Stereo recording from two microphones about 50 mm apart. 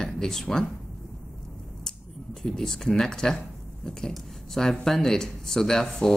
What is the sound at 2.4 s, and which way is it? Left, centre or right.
Speech, centre.